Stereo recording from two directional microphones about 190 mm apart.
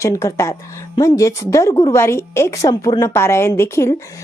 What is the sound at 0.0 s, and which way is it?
Speech, 15° left (ahead or behind).